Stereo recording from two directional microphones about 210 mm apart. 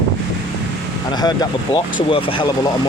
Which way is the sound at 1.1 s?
20° left (ahead or behind).